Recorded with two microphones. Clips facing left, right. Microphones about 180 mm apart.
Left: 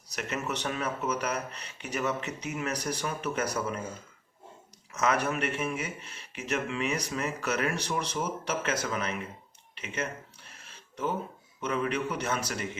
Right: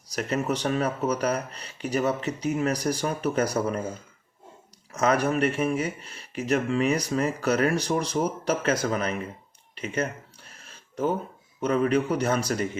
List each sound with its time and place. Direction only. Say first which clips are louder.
0.4 s speech: right 6 dB; 35° right (ahead or behind)
4.9 s speech: right 5 dB; 35° right (ahead or behind)
10.6 s a sound: right 7 dB; 40° right (ahead or behind)
11.6 s speech: right 7 dB; 40° right (ahead or behind)